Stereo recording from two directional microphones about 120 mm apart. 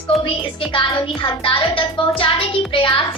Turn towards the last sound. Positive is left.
turn(degrees=45)  # may be behind; listen again after turning